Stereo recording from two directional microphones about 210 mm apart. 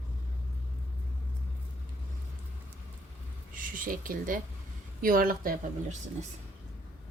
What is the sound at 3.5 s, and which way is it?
Speech, 40° right (ahead or behind).